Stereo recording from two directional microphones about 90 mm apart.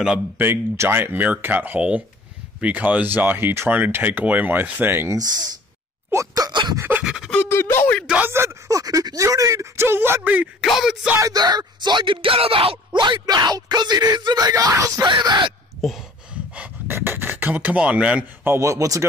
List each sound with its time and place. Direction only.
0.4 s speech: 25° right (ahead or behind)
5.1 s speech: 50° right (ahead or behind)
7.0 s scratch: 10° right (ahead or behind)
7.4 s a sound: 30° left (ahead or behind)
8.3 s speech: 30° right (ahead or behind)
10.6 s speech: centre (ahead or behind)
11.1 s speech: 45° right (ahead or behind); by 13.2 s 65° right (ahead or behind)
13.2 s speech: 50° right (ahead or behind)
15.0 s speech: 55° right (ahead or behind)
16.5 s speech: 20° right (ahead or behind)
18.5 s speech: 35° right (ahead or behind)